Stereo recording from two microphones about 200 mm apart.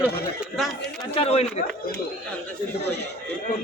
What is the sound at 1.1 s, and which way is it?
Speech, 30° left (ahead or behind).